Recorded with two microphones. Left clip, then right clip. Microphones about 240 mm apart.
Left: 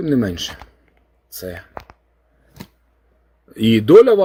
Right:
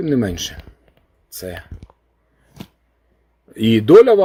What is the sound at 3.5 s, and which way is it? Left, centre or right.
Speech, centre.